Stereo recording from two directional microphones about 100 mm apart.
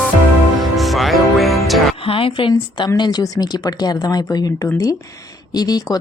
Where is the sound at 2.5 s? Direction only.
45° left (ahead or behind).